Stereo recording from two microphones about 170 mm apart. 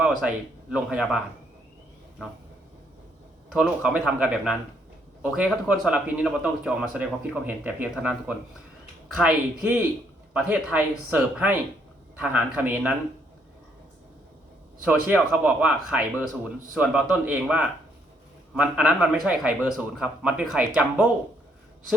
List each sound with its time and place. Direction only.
0.0 s speech: 5° right (ahead or behind)
3.5 s a man's voice: 5° right (ahead or behind)
14.8 s a man's voice: 10° right (ahead or behind)